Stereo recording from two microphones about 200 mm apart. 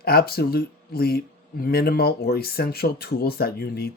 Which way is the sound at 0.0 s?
50° left (ahead or behind).